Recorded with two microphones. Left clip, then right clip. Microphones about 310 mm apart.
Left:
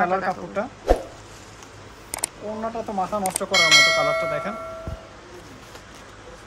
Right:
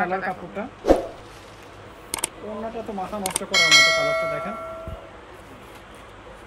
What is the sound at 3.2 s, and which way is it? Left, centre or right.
Speech, centre.